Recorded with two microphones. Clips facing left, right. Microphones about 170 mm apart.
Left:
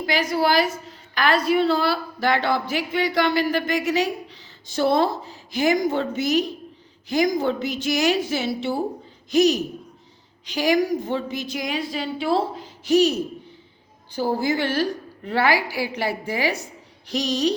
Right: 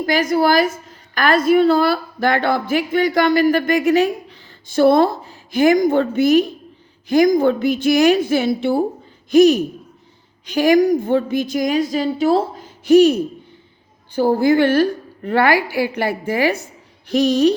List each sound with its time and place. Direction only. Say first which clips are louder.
0.0 s a woman's voice: right 5 dB; 45° right (ahead or behind)